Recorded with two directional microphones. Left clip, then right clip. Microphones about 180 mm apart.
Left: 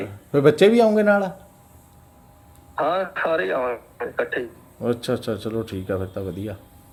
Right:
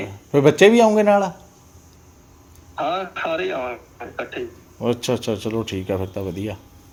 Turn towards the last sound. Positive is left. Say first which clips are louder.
# right 2 dB
turn(degrees=0)  # may be behind; listen again after turning